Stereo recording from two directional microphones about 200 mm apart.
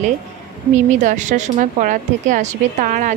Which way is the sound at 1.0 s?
40° right (ahead or behind).